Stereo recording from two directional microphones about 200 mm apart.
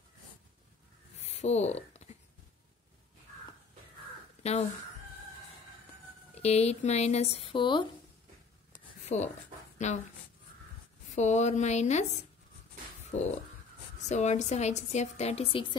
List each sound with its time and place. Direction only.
1.2 s a sound: 30° left (ahead or behind)
4.4 s speech: 30° left (ahead or behind)
6.3 s a woman's voice: 30° left (ahead or behind)
9.8 s a woman's voice: 35° left (ahead or behind)
11.1 s a woman's voice: 35° left (ahead or behind)